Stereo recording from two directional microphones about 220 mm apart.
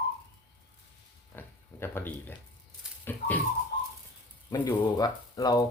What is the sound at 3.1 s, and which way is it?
Speech, 10° left (ahead or behind).